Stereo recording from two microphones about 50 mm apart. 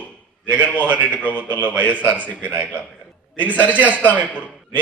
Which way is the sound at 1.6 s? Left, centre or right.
Right.